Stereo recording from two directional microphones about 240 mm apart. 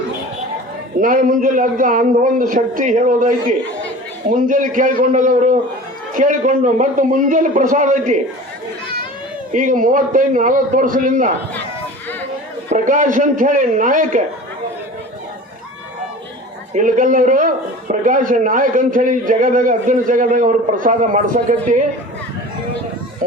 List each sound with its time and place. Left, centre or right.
1.0 s speech: right
9.5 s speech: right
12.7 s speech: right
16.7 s speech: right